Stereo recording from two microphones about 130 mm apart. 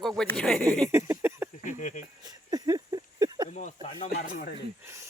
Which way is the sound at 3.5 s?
65° left (ahead or behind).